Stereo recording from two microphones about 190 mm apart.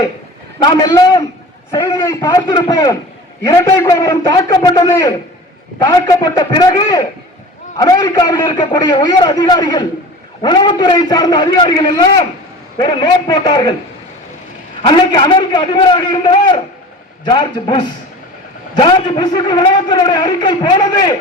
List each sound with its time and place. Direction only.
0.6 s a man's voice: 20° left (ahead or behind)
14.8 s a man's voice: 25° left (ahead or behind)